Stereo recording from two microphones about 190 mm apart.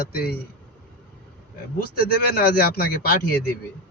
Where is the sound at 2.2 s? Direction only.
55° left (ahead or behind).